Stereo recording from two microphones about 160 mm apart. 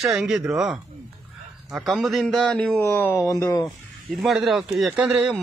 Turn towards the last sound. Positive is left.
turn(degrees=-5)  # may be behind; listen again after turning